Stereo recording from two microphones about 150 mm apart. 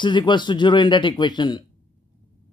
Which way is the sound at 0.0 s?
30° left (ahead or behind).